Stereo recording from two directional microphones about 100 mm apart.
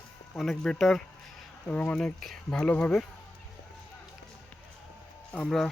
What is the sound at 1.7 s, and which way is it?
Speech, 15° left (ahead or behind).